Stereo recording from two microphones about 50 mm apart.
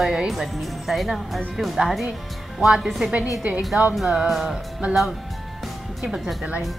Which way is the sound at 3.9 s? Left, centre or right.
Centre.